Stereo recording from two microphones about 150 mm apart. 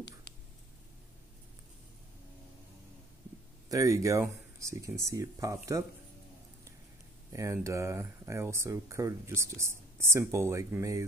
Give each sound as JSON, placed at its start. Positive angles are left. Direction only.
{"t": 3.6, "sound": "speech", "side_deg": -20}
{"t": 7.3, "sound": "speech", "side_deg": -20}